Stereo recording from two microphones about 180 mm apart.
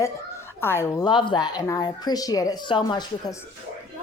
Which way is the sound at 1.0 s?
25° left (ahead or behind).